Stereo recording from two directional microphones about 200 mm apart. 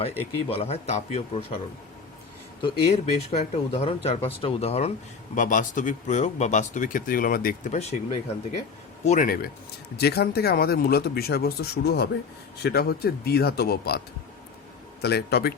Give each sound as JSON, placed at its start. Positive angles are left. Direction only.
{"t": 0.0, "sound": "speech", "side_deg": 30}
{"t": 2.6, "sound": "speech", "side_deg": 25}
{"t": 9.0, "sound": "speech", "side_deg": 45}
{"t": 15.0, "sound": "speech", "side_deg": 55}